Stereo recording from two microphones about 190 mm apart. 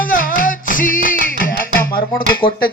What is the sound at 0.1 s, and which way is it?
Music, 45° left (ahead or behind).